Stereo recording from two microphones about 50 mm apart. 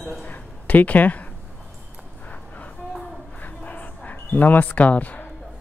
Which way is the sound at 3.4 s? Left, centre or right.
Left.